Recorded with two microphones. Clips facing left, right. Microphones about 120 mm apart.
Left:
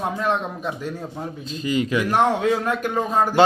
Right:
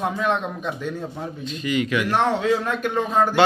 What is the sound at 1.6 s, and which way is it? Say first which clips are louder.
Speech: left 1 dB; 30° left (ahead or behind).